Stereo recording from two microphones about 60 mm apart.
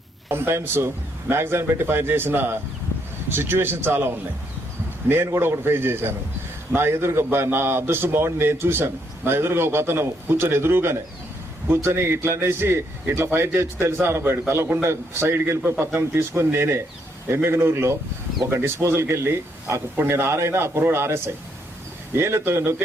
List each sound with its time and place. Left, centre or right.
0.3 s a man's voice: right